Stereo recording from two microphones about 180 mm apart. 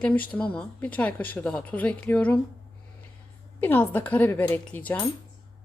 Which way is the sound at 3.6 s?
10° left (ahead or behind).